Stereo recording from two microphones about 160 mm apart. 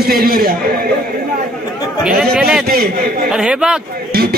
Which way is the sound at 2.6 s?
65° right (ahead or behind).